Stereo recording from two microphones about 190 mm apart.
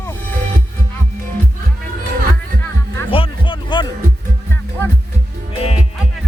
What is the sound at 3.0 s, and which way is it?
Music, 30° left (ahead or behind).